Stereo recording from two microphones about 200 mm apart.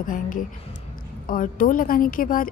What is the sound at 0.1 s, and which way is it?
A woman's voice, 40° left (ahead or behind).